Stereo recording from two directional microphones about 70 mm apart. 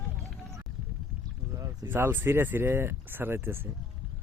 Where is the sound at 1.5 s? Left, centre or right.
Right.